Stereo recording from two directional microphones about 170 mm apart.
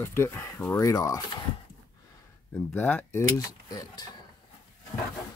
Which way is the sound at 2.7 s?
10° left (ahead or behind).